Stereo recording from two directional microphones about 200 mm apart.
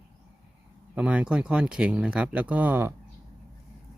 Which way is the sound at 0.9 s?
5° right (ahead or behind).